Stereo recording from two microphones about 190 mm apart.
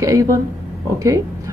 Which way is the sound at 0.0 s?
15° right (ahead or behind).